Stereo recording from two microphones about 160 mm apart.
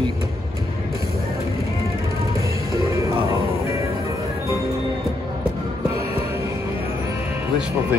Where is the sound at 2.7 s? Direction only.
20° right (ahead or behind).